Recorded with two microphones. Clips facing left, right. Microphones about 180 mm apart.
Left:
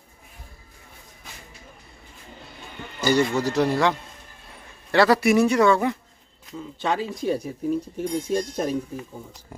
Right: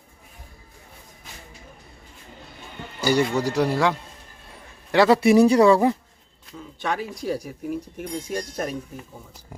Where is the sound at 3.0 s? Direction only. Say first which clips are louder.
Even; 10° right (ahead or behind).